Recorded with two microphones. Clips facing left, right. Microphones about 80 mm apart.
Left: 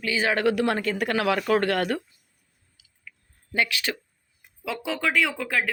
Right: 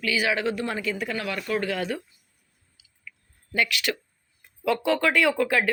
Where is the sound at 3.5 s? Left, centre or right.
Left.